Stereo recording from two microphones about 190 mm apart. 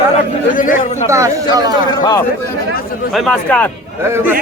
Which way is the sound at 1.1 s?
15° right (ahead or behind).